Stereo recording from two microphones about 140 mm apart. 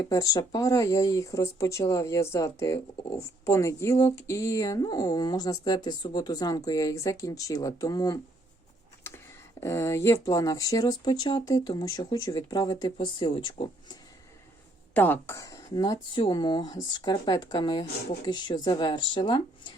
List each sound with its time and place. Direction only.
0.0 s speech: 25° left (ahead or behind)
14.9 s speech: 15° left (ahead or behind); by 19.4 s 35° left (ahead or behind)